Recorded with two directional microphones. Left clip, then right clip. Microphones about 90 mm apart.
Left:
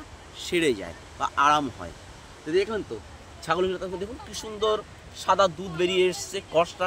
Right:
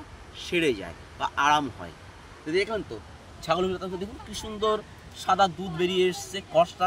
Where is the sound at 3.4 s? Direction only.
60° left (ahead or behind).